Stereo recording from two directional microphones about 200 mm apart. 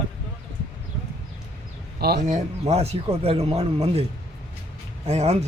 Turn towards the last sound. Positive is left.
turn(degrees=-30)  # may be behind; listen again after turning